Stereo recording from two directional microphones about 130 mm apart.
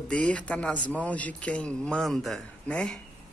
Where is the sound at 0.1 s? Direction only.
10° left (ahead or behind).